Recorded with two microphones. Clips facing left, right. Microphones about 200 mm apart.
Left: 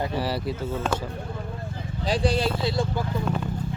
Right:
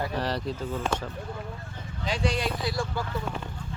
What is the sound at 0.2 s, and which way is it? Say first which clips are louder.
Speech: left 2 dB; 10° left (ahead or behind).